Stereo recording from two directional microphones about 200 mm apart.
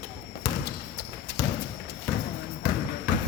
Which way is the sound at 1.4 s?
20° left (ahead or behind).